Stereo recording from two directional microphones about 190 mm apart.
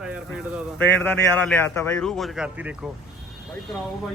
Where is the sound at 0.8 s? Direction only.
5° left (ahead or behind).